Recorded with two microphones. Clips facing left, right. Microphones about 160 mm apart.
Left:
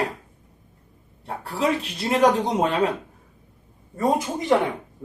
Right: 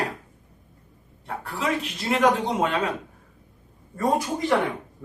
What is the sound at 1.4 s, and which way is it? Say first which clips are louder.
Speech: left 4 dB; 35° left (ahead or behind).